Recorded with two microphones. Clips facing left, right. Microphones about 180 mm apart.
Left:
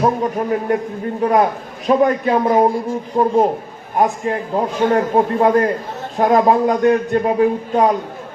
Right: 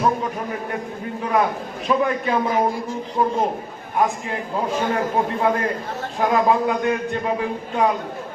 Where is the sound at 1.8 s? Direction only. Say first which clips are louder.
Left 6 dB; 40° left (ahead or behind).